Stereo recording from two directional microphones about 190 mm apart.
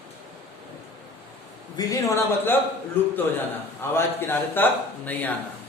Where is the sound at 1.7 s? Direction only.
15° left (ahead or behind).